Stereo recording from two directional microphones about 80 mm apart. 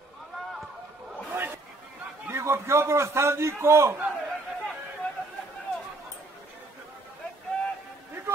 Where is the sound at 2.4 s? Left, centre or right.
Right.